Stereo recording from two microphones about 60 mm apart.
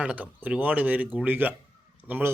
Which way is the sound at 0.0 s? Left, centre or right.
Right.